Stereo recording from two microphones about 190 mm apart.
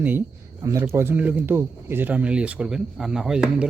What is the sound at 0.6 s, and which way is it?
Speech, 15° right (ahead or behind).